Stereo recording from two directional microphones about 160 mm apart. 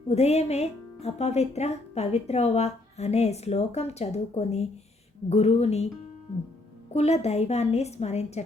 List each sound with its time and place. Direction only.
0.1 s a woman's voice: 40° left (ahead or behind)
6.9 s speech: 45° left (ahead or behind)